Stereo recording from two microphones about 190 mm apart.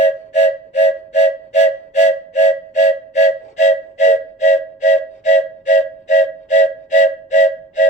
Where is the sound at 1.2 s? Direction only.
35° left (ahead or behind).